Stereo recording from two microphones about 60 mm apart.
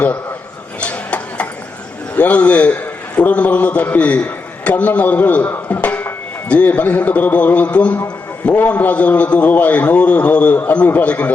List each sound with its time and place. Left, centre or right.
0.8 s a sound: left
2.1 s a man's voice: left
5.7 s music: left
8.4 s a man's voice: left